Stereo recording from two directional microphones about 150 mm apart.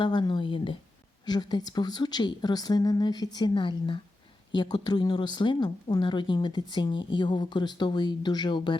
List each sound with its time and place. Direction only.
0.0 s speech: 30° left (ahead or behind)